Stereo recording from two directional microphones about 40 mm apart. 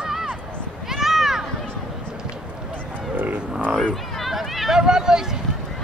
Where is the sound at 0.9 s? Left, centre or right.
Centre.